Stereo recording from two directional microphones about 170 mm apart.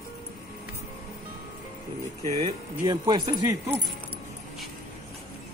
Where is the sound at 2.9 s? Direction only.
25° right (ahead or behind).